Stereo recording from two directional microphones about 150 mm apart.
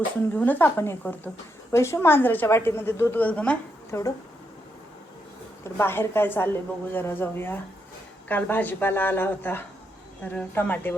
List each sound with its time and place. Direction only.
0.3 s a woman's voice: 10° left (ahead or behind)
3.9 s speech: 20° left (ahead or behind)
5.6 s a woman's voice: 15° left (ahead or behind)